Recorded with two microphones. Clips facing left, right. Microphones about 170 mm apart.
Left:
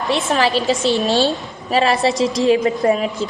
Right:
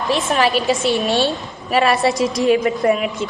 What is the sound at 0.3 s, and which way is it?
Speech, 30° left (ahead or behind).